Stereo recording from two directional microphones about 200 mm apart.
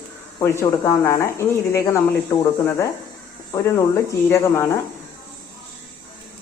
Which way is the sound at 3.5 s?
15° left (ahead or behind).